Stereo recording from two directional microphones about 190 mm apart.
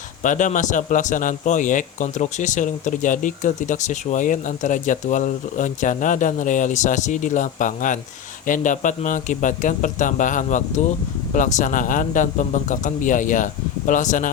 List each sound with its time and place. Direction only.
0.2 s a man's voice: 40° left (ahead or behind)